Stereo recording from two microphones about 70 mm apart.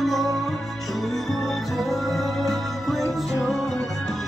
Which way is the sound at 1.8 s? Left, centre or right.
Centre.